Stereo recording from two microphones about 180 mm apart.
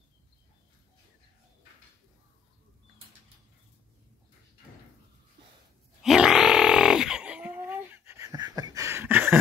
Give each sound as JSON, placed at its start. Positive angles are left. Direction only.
{"t": 6.0, "sound": "grunt", "side_deg": -5}